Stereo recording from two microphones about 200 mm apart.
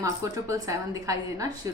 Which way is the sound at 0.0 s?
15° right (ahead or behind).